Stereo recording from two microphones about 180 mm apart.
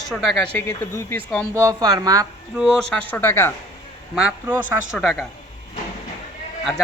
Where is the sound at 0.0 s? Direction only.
Centre (ahead or behind).